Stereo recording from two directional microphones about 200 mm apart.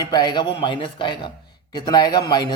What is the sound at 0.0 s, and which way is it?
A man's voice, 20° left (ahead or behind).